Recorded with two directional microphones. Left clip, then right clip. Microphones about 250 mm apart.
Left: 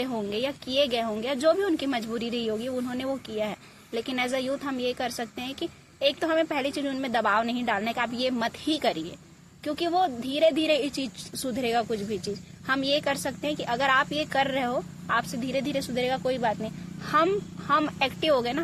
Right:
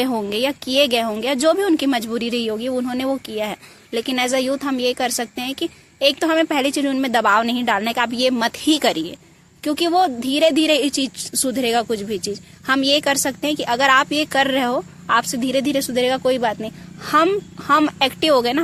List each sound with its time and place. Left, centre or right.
0.0 s a woman's voice: right